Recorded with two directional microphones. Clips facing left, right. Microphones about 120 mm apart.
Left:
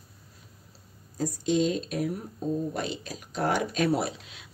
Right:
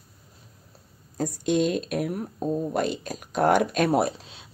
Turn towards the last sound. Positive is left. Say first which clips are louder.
# right 3 dB
turn(degrees=-30)  # may be behind; listen again after turning